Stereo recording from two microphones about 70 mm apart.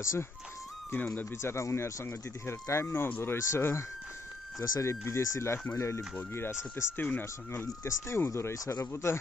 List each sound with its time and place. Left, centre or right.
0.0 s speech: left
1.4 s speech: left
7.0 s speech: left
7.6 s speech: left